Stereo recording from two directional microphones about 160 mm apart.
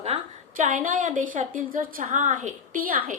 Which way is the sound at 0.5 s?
55° right (ahead or behind).